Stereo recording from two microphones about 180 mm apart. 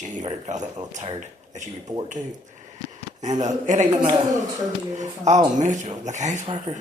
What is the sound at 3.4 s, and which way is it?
Speech, 40° right (ahead or behind).